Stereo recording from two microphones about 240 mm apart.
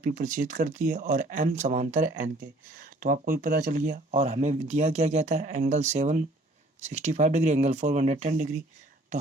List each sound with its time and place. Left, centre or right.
0.0 s speech: right